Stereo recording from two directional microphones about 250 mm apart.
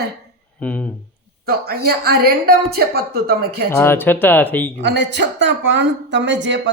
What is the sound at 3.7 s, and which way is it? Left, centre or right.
Speech, centre.